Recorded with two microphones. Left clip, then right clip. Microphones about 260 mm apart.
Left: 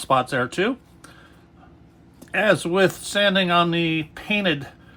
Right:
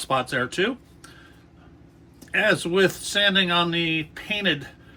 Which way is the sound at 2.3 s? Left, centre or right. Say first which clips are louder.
Left 2 dB; centre.